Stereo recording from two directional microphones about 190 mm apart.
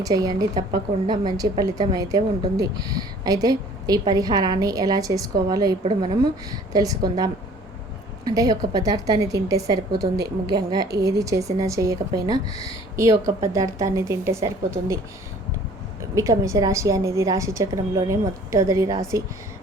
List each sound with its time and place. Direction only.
0.0 s a woman's voice: 20° right (ahead or behind)
6.7 s a woman's voice: 20° right (ahead or behind)
16.1 s a woman's voice: 15° right (ahead or behind)